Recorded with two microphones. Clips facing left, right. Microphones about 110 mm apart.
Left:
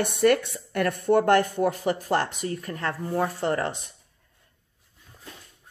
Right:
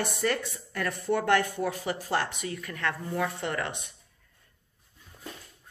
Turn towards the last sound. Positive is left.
turn(degrees=35)  # may be behind; listen again after turning